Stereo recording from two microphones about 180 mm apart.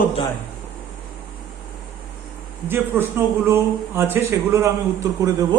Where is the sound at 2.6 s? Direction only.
10° right (ahead or behind).